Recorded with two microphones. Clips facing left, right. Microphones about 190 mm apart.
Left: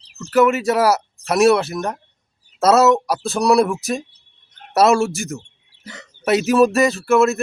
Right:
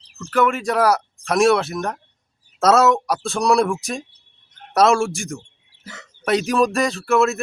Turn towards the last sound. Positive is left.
turn(degrees=0)  # may be behind; listen again after turning